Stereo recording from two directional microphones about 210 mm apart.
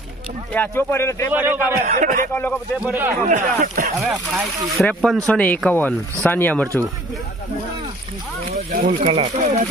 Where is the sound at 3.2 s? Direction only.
35° right (ahead or behind).